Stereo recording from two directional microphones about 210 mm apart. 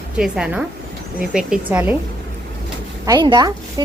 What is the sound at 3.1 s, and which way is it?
Speech, 20° right (ahead or behind).